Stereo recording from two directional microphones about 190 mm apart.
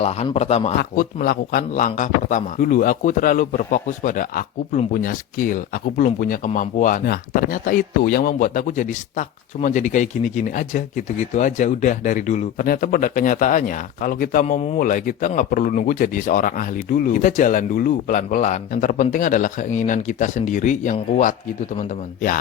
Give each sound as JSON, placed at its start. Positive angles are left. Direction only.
{"t": 0.0, "sound": "speech", "side_deg": 35}
{"t": 0.8, "sound": "a man's voice", "side_deg": 50}